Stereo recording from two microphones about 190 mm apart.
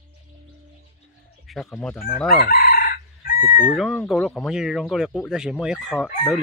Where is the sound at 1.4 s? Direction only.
Centre (ahead or behind).